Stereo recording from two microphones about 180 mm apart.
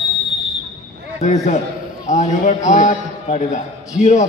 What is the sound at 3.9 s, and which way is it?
Speech, 40° left (ahead or behind).